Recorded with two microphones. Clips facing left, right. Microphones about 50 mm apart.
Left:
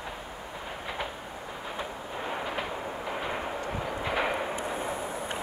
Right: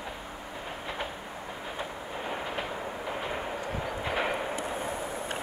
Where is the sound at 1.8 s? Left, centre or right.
Centre.